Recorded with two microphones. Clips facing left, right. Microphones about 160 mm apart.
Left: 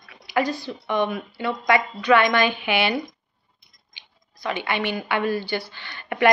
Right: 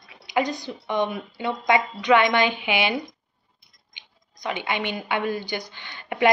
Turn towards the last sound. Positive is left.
turn(degrees=-15)  # may be behind; listen again after turning